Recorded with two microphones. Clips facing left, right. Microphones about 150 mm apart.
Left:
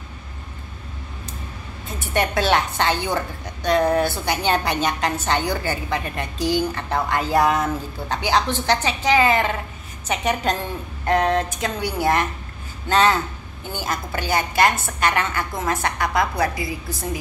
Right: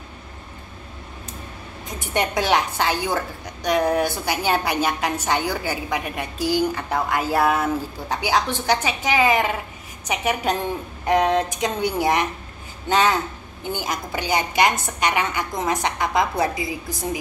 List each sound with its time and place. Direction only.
1.9 s a woman's voice: 15° right (ahead or behind)